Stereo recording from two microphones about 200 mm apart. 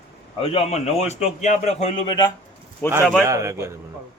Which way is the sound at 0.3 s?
30° left (ahead or behind).